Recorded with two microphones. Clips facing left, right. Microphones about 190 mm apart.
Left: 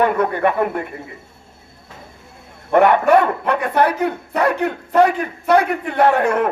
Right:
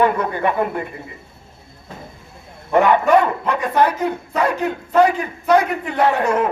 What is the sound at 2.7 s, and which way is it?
Speech, 60° left (ahead or behind).